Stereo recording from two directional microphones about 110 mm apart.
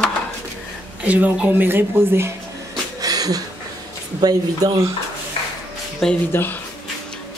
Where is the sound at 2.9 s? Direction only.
35° right (ahead or behind).